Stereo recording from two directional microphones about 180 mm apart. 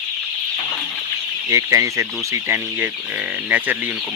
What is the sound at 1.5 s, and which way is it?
Speech, 15° right (ahead or behind).